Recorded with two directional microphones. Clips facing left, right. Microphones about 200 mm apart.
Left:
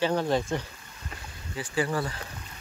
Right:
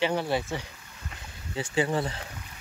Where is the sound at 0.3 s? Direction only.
10° right (ahead or behind).